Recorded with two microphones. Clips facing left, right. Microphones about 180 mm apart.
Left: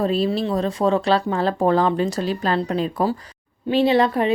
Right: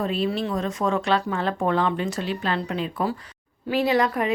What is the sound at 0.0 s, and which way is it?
A woman's voice, 35° left (ahead or behind).